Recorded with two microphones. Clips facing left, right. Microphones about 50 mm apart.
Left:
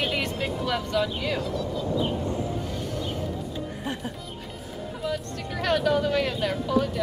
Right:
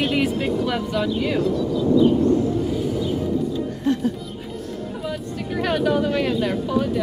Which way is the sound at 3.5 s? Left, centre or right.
Centre.